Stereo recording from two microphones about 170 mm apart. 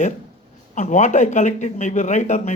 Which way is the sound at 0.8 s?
45° left (ahead or behind).